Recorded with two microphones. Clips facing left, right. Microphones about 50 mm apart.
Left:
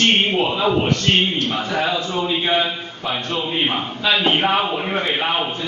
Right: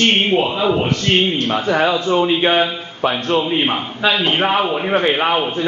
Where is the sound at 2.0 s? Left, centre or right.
Right.